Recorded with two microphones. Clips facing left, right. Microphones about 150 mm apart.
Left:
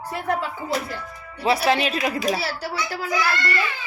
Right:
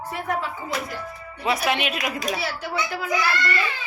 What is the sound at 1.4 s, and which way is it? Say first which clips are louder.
A child's voice: left 4 dB; 30° left (ahead or behind).